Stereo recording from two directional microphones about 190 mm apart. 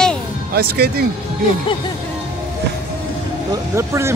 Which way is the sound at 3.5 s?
15° right (ahead or behind).